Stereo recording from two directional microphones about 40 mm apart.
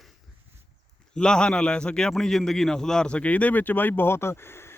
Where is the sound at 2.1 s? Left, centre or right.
Centre.